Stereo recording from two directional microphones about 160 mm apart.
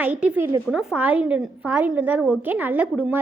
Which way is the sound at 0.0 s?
10° right (ahead or behind).